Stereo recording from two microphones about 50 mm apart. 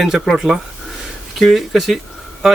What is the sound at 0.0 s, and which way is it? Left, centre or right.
Speech, centre.